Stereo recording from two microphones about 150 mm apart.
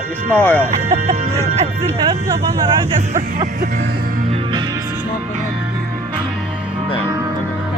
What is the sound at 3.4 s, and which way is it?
Music, 55° right (ahead or behind).